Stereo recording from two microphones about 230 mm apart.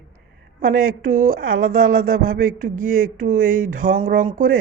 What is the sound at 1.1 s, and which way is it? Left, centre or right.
A woman's voice, right.